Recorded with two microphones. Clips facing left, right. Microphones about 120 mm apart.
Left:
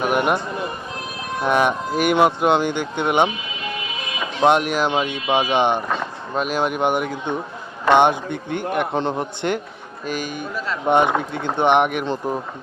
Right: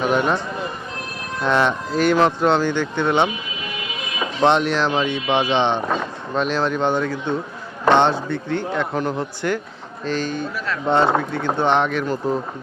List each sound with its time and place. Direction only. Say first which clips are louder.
0.0 s speech: even; 15° left (ahead or behind)
4.4 s speech: even; 10° left (ahead or behind)
10.1 s speech: right 3 dB; 10° left (ahead or behind)